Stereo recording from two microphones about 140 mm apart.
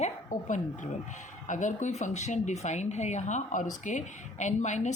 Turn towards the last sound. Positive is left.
turn(degrees=55)  # may be behind; listen again after turning